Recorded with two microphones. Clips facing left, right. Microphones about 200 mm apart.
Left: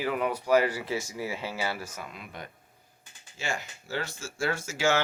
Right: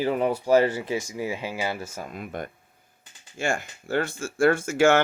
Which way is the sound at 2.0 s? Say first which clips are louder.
Right 8 dB; 50° right (ahead or behind).